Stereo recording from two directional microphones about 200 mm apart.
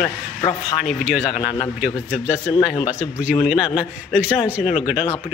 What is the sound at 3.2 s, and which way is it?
Speech, 40° left (ahead or behind).